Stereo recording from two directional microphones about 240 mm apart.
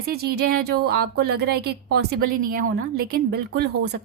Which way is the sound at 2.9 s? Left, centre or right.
Right.